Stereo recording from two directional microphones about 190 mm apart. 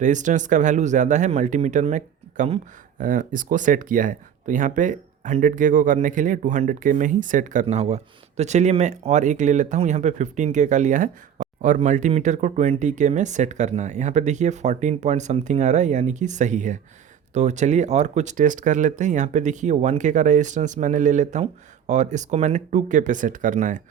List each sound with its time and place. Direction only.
0.0 s speech: 40° right (ahead or behind)